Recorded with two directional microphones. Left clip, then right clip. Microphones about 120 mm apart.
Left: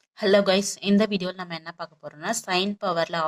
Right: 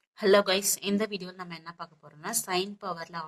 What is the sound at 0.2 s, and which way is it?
A woman's voice, 25° left (ahead or behind).